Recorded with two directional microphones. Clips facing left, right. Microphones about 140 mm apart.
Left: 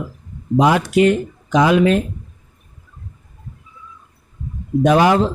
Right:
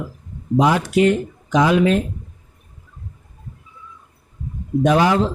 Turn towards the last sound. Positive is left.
turn(degrees=65)  # may be behind; listen again after turning